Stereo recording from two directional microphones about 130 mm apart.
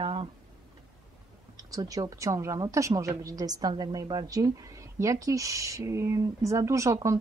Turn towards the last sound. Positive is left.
turn(degrees=-25)  # may be behind; listen again after turning